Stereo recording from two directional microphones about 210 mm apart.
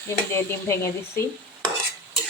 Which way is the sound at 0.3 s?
10° left (ahead or behind).